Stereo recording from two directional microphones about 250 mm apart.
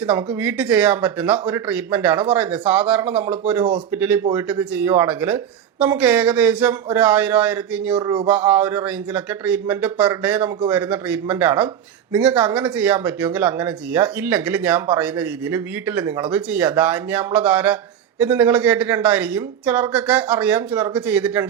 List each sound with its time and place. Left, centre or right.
0.0 s speech: centre
7.9 s speech: centre
8.3 s speech: centre